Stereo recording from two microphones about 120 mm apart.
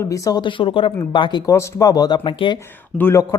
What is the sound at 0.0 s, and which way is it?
Speech, 30° left (ahead or behind).